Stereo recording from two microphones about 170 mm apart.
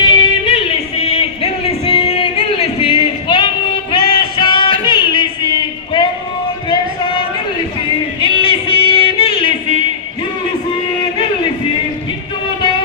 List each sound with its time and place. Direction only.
0.2 s music: 35° left (ahead or behind)
8.2 s music: 30° left (ahead or behind)